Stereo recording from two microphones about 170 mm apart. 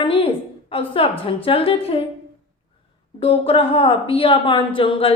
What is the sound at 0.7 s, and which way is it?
Speech, 35° left (ahead or behind).